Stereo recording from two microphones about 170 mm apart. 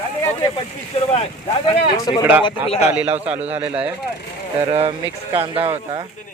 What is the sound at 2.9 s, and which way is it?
Speech, 10° right (ahead or behind).